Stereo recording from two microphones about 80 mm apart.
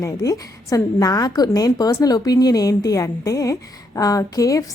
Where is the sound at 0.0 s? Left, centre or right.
Left.